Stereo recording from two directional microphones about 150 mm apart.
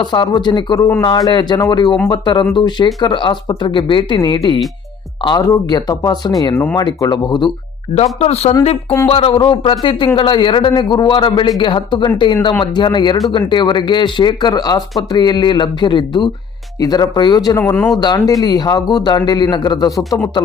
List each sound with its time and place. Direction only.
0.0 s a man's voice: 30° left (ahead or behind)
6.7 s speech: 30° left (ahead or behind)
7.9 s a man's voice: 45° left (ahead or behind); by 20.1 s 25° left (ahead or behind)